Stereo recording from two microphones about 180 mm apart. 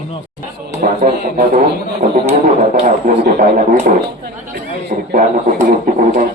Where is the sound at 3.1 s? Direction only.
50° right (ahead or behind).